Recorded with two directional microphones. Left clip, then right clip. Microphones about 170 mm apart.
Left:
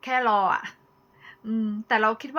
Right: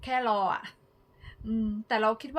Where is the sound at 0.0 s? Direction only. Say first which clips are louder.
Left 5 dB; 30° right (ahead or behind).